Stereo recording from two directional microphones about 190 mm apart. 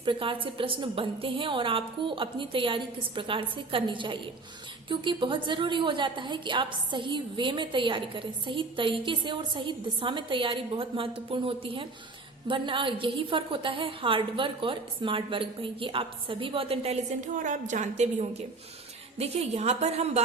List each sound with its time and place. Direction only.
0.0 s a woman's voice: 25° right (ahead or behind)
17.3 s a woman's voice: 40° right (ahead or behind)